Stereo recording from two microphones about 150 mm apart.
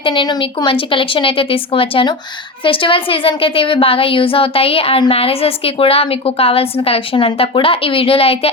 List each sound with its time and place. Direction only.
0.0 s a woman's voice: 30° left (ahead or behind)